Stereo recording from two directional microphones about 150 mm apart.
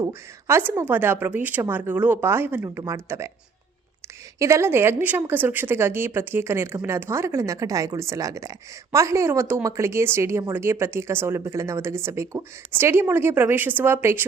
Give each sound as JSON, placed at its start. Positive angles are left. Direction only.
{"t": 0.0, "sound": "speech", "side_deg": -15}
{"t": 4.4, "sound": "speech", "side_deg": -20}